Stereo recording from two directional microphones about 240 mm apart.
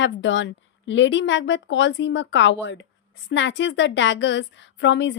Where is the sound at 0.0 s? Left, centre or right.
Left.